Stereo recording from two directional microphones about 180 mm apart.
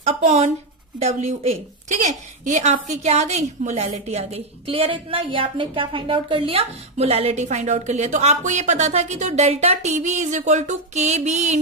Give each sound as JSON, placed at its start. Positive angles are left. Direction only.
{"t": 0.0, "sound": "a woman's voice", "side_deg": -40}